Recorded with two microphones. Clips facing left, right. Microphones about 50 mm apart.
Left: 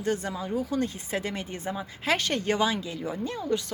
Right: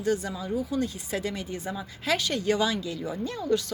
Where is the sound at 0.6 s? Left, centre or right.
Left.